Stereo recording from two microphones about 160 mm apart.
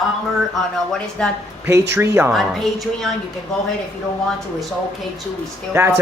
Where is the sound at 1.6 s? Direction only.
15° right (ahead or behind).